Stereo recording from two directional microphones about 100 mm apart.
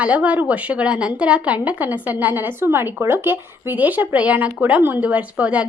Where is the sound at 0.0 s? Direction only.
15° right (ahead or behind).